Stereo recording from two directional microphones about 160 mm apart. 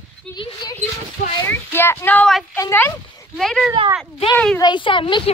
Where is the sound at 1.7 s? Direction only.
15° left (ahead or behind).